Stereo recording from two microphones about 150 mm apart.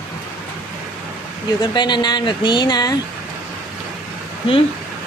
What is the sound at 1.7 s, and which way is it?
Speech, 30° left (ahead or behind).